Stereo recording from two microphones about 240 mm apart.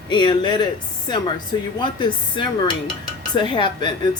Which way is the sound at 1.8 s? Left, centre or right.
Centre.